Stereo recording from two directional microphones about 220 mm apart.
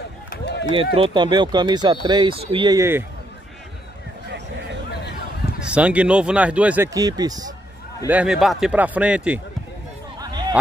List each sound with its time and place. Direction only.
0.3 s run: 50° left (ahead or behind)
0.9 s speech: 20° right (ahead or behind)
5.7 s speech: 5° right (ahead or behind)
8.1 s a man's voice: 5° right (ahead or behind)
10.1 s a sound: 20° right (ahead or behind)